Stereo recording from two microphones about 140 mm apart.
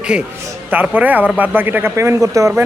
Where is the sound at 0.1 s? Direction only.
5° right (ahead or behind).